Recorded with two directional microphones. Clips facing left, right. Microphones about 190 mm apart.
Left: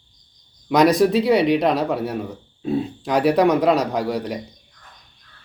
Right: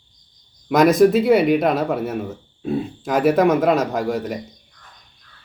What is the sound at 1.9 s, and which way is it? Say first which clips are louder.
A man's voice: right 1 dB; 5° right (ahead or behind).